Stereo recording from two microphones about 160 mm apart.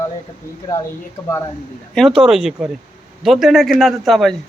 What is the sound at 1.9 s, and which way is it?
Speech, centre (ahead or behind).